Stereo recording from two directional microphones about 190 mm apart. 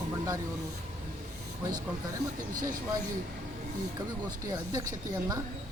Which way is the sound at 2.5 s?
45° right (ahead or behind).